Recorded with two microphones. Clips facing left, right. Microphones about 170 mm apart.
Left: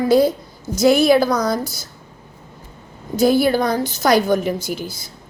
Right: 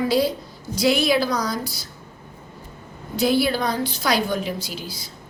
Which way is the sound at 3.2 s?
45° left (ahead or behind).